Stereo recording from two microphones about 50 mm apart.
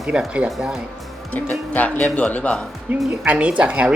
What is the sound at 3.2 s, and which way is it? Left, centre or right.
Speech, right.